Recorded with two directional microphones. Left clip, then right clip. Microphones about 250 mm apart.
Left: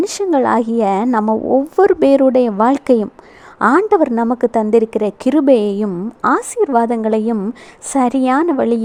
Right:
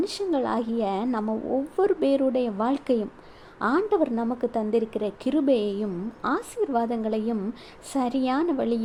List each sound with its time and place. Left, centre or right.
0.0 s a woman's voice: left